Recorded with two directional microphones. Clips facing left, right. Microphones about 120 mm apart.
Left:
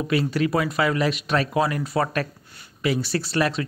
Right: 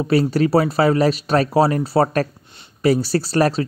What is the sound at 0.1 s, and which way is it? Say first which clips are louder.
Speech: right 7 dB; 40° right (ahead or behind).